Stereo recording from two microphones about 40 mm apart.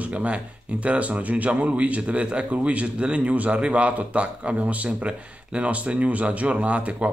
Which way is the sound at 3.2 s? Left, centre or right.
Right.